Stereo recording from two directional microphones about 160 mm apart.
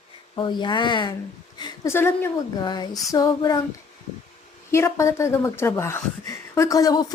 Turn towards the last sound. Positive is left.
turn(degrees=25)  # may be behind; listen again after turning